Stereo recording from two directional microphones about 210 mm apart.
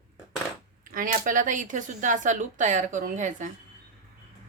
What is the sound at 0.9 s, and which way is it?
Speech, 40° right (ahead or behind).